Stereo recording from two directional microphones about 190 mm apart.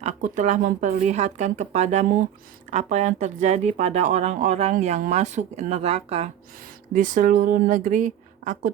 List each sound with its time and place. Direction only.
0.0 s speech: 35° right (ahead or behind)